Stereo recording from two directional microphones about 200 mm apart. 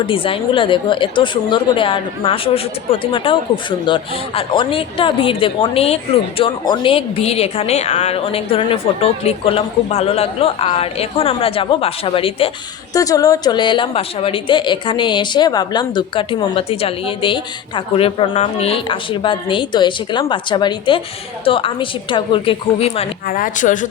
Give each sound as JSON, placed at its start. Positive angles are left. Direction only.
{"t": 0.1, "sound": "speech", "side_deg": 25}
{"t": 23.3, "sound": "speech", "side_deg": 40}